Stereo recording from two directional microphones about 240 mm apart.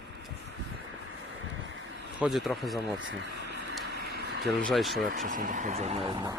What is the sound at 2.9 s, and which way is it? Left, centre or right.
Speech, right.